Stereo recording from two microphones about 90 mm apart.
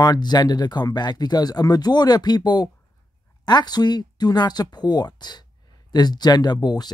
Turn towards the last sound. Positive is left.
turn(degrees=50)  # may be behind; listen again after turning